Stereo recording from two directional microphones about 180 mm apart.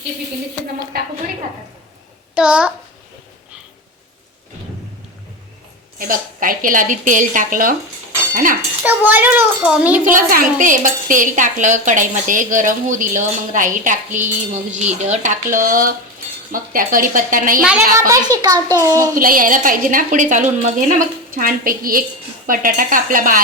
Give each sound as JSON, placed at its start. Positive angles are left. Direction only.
{"t": 0.9, "sound": "a woman's voice", "side_deg": -55}
{"t": 2.3, "sound": "a child's voice", "side_deg": -5}
{"t": 6.0, "sound": "a woman's voice", "side_deg": -50}
{"t": 8.8, "sound": "a child's voice", "side_deg": -10}
{"t": 10.0, "sound": "a woman's voice", "side_deg": -50}
{"t": 17.6, "sound": "a child's voice", "side_deg": -10}
{"t": 18.3, "sound": "a child's voice", "side_deg": -20}
{"t": 19.1, "sound": "a woman's voice", "side_deg": -50}